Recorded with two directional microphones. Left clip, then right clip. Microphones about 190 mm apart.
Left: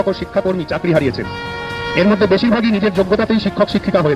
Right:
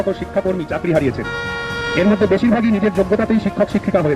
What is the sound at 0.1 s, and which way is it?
Speech, 20° left (ahead or behind).